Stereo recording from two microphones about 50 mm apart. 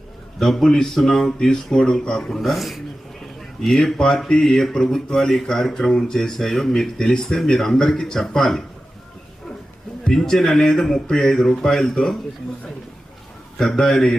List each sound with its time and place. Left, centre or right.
0.3 s speech: centre
3.6 s speech: centre
10.1 s speech: centre
13.6 s speech: centre